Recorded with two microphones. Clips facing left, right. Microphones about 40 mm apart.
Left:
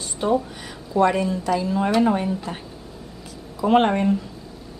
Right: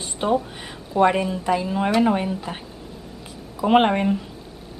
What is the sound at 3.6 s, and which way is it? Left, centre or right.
Speech, right.